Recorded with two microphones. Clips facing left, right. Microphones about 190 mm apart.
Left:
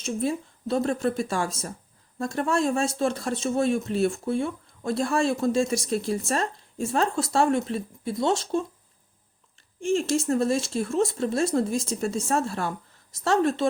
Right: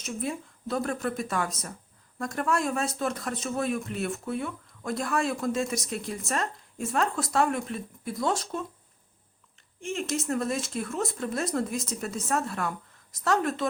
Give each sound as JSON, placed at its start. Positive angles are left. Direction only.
{"t": 0.0, "sound": "speech", "side_deg": 30}
{"t": 9.8, "sound": "speech", "side_deg": 30}